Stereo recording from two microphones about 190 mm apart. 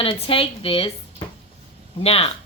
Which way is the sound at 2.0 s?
30° left (ahead or behind).